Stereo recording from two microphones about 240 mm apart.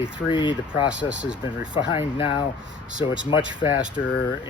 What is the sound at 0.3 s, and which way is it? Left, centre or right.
Speech, centre.